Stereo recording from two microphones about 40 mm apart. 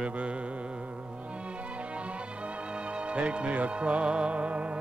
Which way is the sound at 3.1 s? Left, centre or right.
Right.